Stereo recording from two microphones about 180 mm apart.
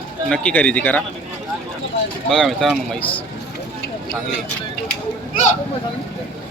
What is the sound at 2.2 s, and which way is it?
Speech, centre (ahead or behind).